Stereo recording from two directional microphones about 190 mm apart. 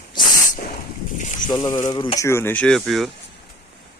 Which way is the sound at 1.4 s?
20° left (ahead or behind).